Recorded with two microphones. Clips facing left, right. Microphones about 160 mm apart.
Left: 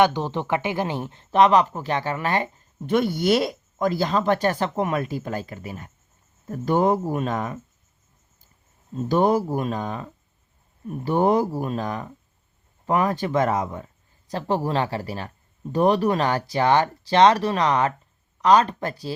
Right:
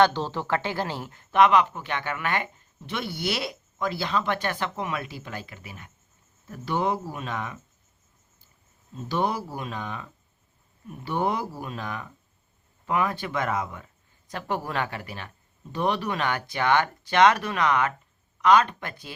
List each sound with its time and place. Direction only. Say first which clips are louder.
0.0 s speech: left 2 dB; 15° left (ahead or behind); by 2.6 s 35° left (ahead or behind)
2.8 s speech: left 10 dB; 45° left (ahead or behind)
9.0 s speech: left 8 dB; 45° left (ahead or behind)